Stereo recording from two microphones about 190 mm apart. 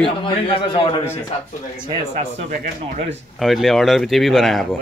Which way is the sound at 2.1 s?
35° right (ahead or behind).